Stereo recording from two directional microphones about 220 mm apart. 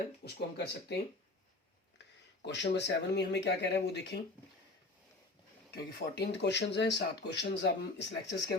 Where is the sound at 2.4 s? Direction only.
50° left (ahead or behind).